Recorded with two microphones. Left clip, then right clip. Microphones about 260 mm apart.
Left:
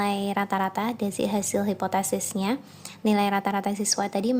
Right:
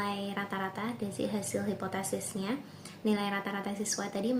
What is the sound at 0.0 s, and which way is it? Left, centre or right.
A woman's voice, left.